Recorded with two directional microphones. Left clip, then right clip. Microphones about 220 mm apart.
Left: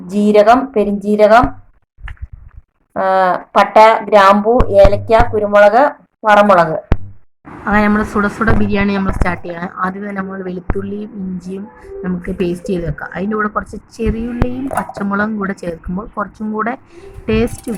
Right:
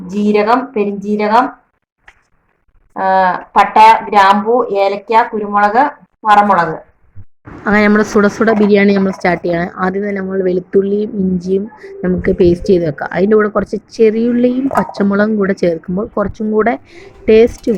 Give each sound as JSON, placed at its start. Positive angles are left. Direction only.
{"t": 0.1, "sound": "speech", "side_deg": 50}
{"t": 2.9, "sound": "speech", "side_deg": 50}
{"t": 7.6, "sound": "a woman's voice", "side_deg": -15}